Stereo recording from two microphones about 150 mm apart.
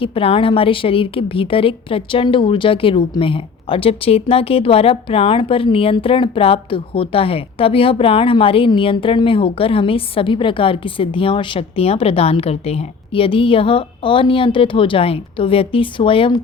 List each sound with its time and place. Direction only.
0.0 s a woman's voice: 40° left (ahead or behind)